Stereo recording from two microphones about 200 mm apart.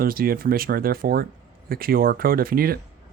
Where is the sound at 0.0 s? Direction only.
45° right (ahead or behind).